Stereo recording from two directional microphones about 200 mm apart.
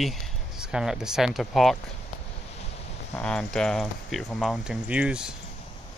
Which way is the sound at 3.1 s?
5° left (ahead or behind).